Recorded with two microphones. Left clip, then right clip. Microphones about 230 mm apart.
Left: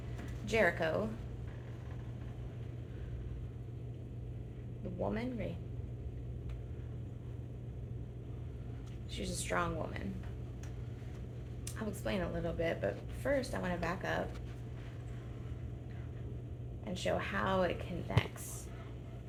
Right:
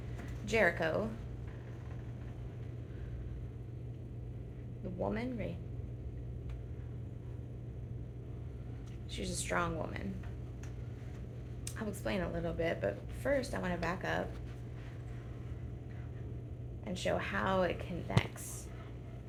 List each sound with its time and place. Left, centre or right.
0.4 s a woman's voice: right
4.9 s a woman's voice: right
9.1 s a woman's voice: right
11.8 s a woman's voice: right
16.8 s a woman's voice: right